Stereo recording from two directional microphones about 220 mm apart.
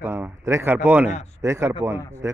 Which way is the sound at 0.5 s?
10° right (ahead or behind).